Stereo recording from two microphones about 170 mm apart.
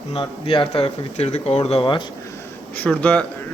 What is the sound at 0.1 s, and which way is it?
Speech, 30° left (ahead or behind).